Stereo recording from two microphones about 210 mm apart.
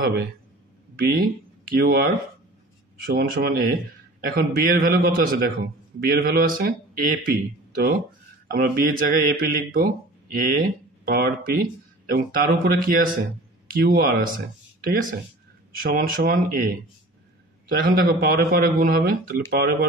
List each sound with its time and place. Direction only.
0.9 s speech: 45° right (ahead or behind)